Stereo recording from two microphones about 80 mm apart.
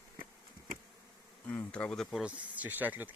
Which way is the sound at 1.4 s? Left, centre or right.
Centre.